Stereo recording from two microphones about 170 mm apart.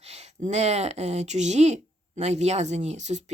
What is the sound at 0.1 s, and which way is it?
Speech, 40° right (ahead or behind).